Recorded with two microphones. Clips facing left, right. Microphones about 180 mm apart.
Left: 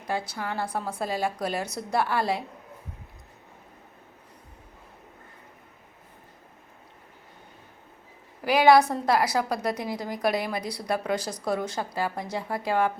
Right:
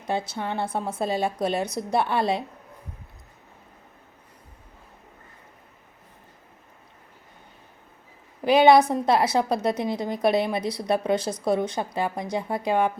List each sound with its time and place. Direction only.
0.1 s a woman's voice: 25° right (ahead or behind)
8.4 s a woman's voice: 20° right (ahead or behind)